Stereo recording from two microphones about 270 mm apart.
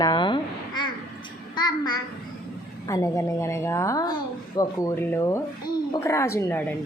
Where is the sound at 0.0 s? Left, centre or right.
Centre.